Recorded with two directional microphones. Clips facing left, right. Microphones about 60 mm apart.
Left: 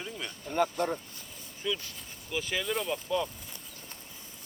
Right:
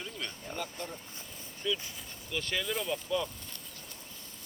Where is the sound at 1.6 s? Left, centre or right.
Centre.